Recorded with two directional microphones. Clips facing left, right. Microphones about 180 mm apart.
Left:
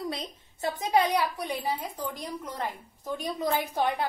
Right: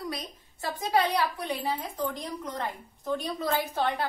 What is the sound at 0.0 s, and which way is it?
A woman's voice, 25° left (ahead or behind).